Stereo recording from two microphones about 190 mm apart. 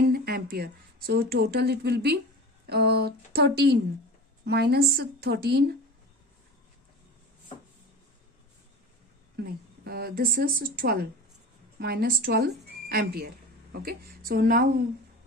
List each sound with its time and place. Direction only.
0.1 s a woman's voice: 50° right (ahead or behind)
9.3 s a woman's voice: 55° right (ahead or behind)